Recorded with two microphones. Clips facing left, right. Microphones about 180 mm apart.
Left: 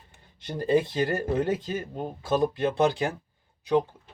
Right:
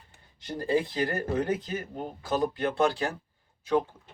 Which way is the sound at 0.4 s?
20° left (ahead or behind).